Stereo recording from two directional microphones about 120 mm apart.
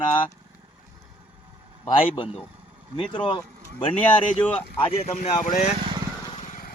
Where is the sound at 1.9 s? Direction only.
45° left (ahead or behind).